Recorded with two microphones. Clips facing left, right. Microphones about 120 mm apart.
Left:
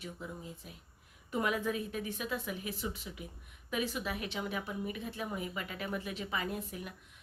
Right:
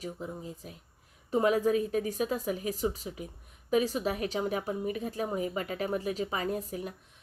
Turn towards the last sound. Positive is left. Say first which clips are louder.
# right 6 dB
turn(degrees=-40)  # may be behind; listen again after turning